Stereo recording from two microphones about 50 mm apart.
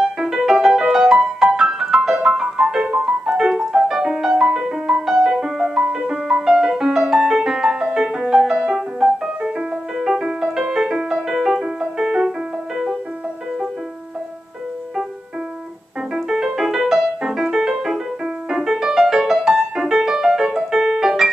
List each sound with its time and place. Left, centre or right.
0.2 s music: centre
16.3 s music: centre